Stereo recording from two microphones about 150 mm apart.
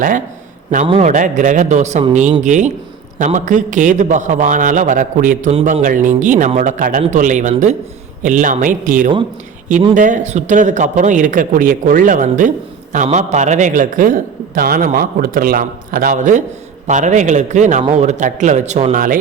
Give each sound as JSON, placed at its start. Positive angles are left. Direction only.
{"t": 1.0, "sound": "a man's voice", "side_deg": -55}
{"t": 14.8, "sound": "a man's voice", "side_deg": -70}